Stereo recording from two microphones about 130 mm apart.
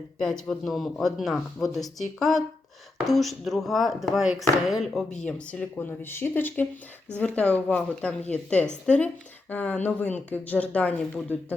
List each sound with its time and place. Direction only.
0.2 s speech: 5° left (ahead or behind)